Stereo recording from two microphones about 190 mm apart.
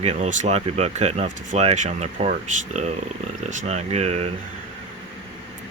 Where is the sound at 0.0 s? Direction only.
35° right (ahead or behind).